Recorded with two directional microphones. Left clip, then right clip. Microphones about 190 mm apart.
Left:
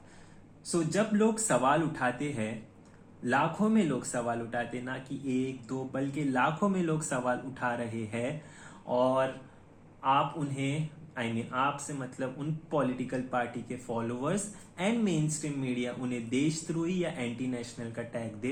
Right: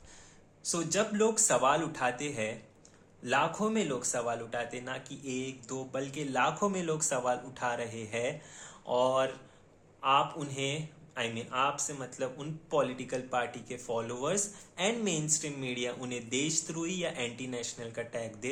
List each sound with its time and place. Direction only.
0.7 s speech: 25° right (ahead or behind)